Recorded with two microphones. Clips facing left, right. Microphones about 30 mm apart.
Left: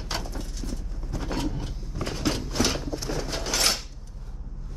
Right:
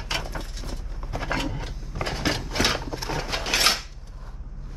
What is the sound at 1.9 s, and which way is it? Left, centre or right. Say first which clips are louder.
Scissors: right 2 dB; right.